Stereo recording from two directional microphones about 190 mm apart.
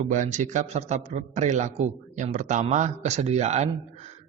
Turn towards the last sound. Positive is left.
turn(degrees=-35)  # may be behind; listen again after turning